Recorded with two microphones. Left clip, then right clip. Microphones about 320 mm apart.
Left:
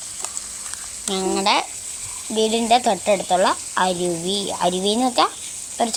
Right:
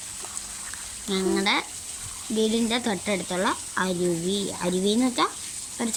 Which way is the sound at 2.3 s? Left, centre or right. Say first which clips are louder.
Left 5 dB; left.